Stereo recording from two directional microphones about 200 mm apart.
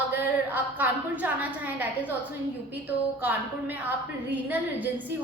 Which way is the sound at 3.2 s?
10° right (ahead or behind).